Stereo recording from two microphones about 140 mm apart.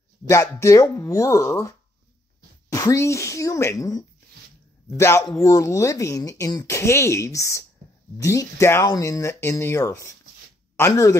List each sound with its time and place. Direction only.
0.3 s speech: 20° left (ahead or behind)